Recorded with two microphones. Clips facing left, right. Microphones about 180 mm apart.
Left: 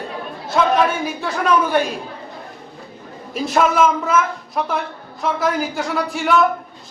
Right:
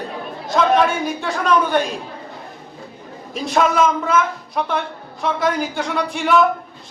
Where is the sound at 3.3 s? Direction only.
5° left (ahead or behind).